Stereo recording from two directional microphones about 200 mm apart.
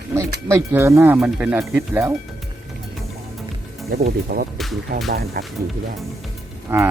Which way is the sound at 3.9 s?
50° right (ahead or behind).